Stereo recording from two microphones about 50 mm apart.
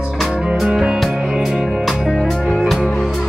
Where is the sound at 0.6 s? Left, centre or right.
Centre.